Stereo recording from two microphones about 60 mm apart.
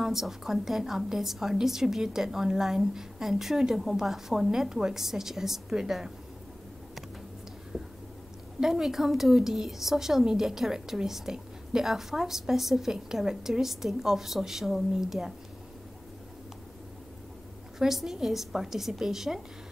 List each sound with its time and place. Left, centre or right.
0.0 s a woman's voice: centre
7.7 s a sound: centre
8.5 s a woman's voice: centre
17.7 s a woman's voice: centre